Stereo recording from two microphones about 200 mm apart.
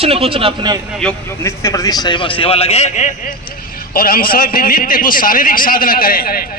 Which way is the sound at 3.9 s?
45° left (ahead or behind).